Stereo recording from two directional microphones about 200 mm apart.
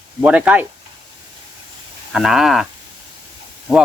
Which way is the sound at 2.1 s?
Centre (ahead or behind).